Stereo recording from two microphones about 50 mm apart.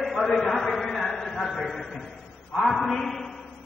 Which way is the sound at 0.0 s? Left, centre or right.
Centre.